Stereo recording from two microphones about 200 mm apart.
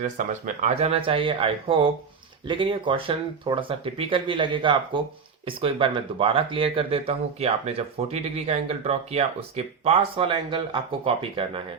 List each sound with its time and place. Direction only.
0.0 s speech: 40° right (ahead or behind)